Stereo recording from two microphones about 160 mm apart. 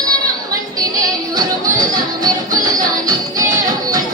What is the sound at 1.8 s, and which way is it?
Music, 25° right (ahead or behind).